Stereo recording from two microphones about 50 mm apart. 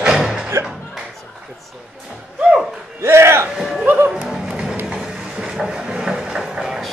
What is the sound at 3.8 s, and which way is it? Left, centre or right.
Music, right.